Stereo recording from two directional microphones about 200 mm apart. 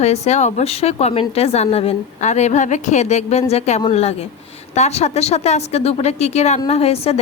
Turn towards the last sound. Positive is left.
turn(degrees=30)  # may be behind; listen again after turning